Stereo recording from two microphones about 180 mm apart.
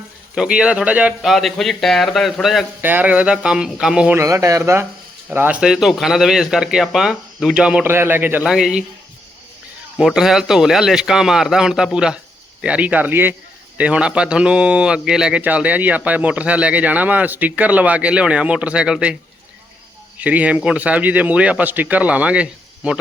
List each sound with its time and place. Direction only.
0.3 s a man's voice: 5° right (ahead or behind)
4.2 s a man's voice: 15° right (ahead or behind); by 8.8 s centre (ahead or behind)
10.0 s a man's voice: centre (ahead or behind)
20.1 s speech: 10° right (ahead or behind)